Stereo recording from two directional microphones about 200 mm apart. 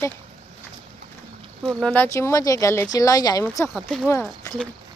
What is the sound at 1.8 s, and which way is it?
Speech, 5° left (ahead or behind).